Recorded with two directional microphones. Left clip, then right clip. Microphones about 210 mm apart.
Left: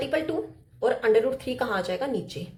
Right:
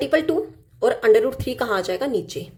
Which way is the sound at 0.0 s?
35° right (ahead or behind).